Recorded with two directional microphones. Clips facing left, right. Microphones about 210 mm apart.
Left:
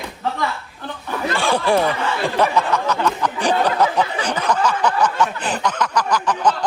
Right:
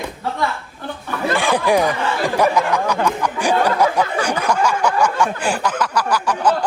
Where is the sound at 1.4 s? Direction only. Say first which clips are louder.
Right 1 dB; 15° right (ahead or behind).